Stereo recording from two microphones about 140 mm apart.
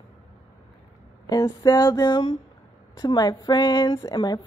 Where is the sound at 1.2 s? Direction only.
25° left (ahead or behind).